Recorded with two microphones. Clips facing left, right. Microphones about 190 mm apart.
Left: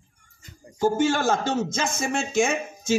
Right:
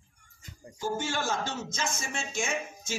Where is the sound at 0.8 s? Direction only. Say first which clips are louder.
Left 10 dB; 85° left.